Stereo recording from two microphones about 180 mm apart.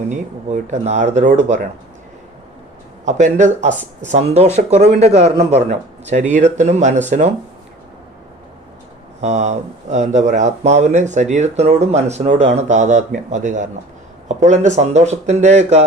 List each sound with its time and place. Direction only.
0.1 s speech: 40° right (ahead or behind)
3.0 s speech: 40° right (ahead or behind)
9.2 s speech: 40° right (ahead or behind)